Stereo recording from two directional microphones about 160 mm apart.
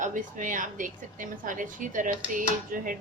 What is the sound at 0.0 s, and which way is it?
A woman's voice, 55° right (ahead or behind).